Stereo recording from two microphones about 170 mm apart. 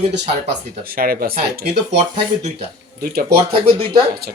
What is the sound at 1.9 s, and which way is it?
Speech, 40° right (ahead or behind).